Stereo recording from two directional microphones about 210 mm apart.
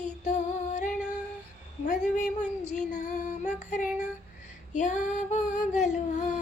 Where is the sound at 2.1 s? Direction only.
35° left (ahead or behind).